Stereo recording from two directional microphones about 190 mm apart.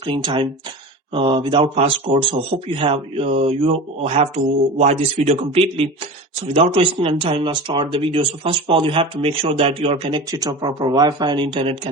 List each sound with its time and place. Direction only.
0.0 s a man's voice: 25° right (ahead or behind)